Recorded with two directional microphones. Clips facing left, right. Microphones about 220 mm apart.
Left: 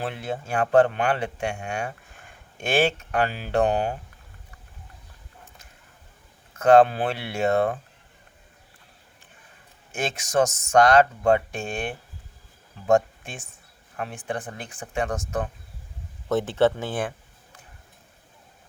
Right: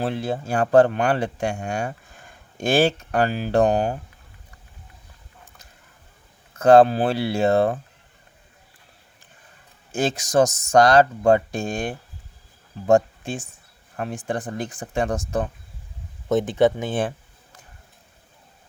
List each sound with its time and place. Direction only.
0.0 s speech: 35° right (ahead or behind)
6.6 s speech: 35° right (ahead or behind)
9.9 s speech: 35° right (ahead or behind)
16.3 s speech: 15° right (ahead or behind)